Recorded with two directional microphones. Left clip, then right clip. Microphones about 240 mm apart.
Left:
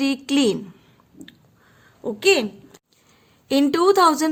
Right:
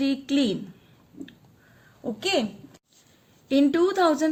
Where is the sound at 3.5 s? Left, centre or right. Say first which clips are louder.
Left 4 dB; left.